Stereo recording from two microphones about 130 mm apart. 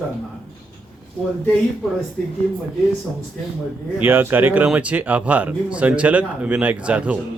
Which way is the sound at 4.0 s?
15° right (ahead or behind).